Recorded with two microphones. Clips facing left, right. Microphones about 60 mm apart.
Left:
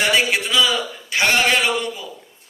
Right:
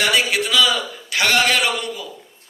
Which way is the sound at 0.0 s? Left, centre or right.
Left.